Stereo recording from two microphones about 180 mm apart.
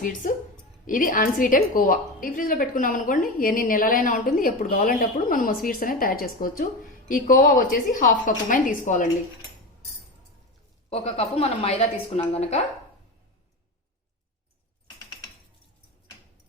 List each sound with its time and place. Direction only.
0.0 s a woman's voice: 45° left (ahead or behind)
10.8 s a woman's voice: 35° left (ahead or behind)